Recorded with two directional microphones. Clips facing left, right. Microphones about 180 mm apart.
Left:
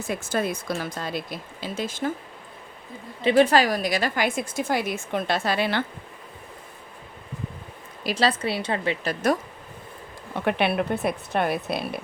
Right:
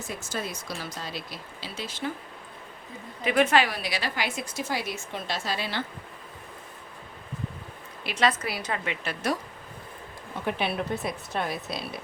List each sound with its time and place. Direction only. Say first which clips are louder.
0.1 s a woman's voice: left 9 dB; 55° left (ahead or behind)
3.2 s a woman's voice: left 4 dB; 30° left (ahead or behind); by 5.8 s 60° left (ahead or behind)
8.0 s a woman's voice: left 3 dB; 30° left (ahead or behind)
10.4 s a woman's voice: left 6 dB; 65° left (ahead or behind)